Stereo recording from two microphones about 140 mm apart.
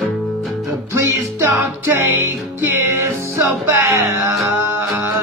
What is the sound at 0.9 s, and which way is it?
Music, 20° right (ahead or behind).